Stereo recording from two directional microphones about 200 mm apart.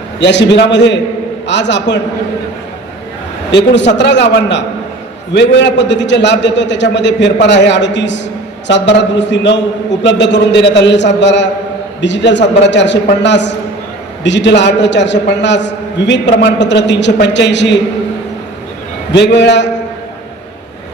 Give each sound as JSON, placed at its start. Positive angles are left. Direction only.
{"t": 0.2, "sound": "a man's voice", "side_deg": 60}
{"t": 3.5, "sound": "a man's voice", "side_deg": 60}
{"t": 19.1, "sound": "a man's voice", "side_deg": 60}